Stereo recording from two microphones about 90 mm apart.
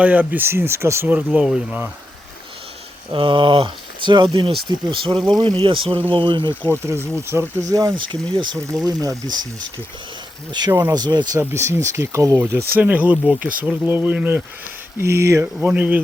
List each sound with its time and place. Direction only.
0.0 s speech: 20° right (ahead or behind)
1.0 s speech: 15° right (ahead or behind)
3.1 s speech: 70° right (ahead or behind)
5.2 s speech: 50° right (ahead or behind)
5.5 s speech: 75° right (ahead or behind)
6.7 s speech: 25° right (ahead or behind)
7.7 s speech: 40° right (ahead or behind)
7.9 s speech: 65° right (ahead or behind)
8.9 s speech: 45° right (ahead or behind)
10.7 s speech: 25° right (ahead or behind)
10.9 s speech: 50° right (ahead or behind)
11.3 s speech: 30° right (ahead or behind)
12.8 s speech: 15° right (ahead or behind)
15.6 s speech: 15° right (ahead or behind)